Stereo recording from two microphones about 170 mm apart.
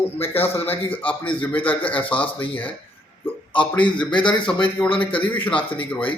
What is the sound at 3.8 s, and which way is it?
Speech, 30° left (ahead or behind).